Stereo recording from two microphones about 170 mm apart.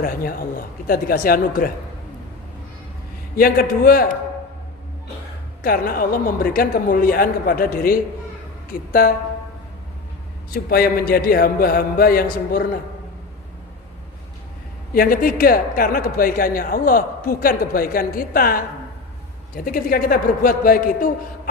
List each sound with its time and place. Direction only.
0.0 s speech: 60° left (ahead or behind)
3.3 s speech: 60° left (ahead or behind)
5.6 s speech: 60° left (ahead or behind)
10.5 s speech: 65° left (ahead or behind)
14.9 s speech: 55° left (ahead or behind)